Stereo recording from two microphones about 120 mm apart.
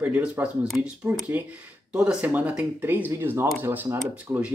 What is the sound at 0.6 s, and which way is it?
Speech, centre (ahead or behind).